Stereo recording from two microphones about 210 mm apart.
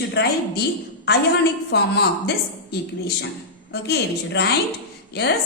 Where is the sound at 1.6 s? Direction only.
50° left (ahead or behind).